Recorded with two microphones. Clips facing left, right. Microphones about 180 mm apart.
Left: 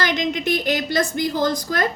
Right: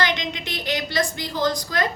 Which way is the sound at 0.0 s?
50° left (ahead or behind).